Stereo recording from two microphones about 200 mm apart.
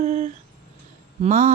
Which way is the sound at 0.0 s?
35° right (ahead or behind).